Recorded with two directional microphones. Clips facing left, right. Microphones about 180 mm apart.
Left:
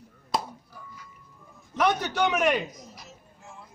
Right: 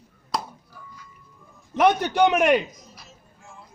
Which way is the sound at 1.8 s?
55° right (ahead or behind).